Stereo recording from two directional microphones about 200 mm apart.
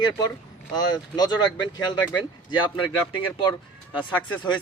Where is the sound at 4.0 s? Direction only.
20° left (ahead or behind).